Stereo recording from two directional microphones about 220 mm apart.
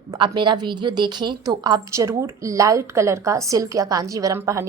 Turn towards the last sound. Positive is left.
turn(degrees=-15)  # may be behind; listen again after turning